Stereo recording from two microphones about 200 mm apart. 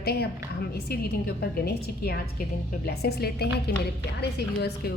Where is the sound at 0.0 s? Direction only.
55° left (ahead or behind).